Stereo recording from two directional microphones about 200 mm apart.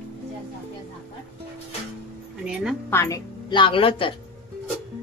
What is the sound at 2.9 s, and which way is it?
Speech, 15° left (ahead or behind).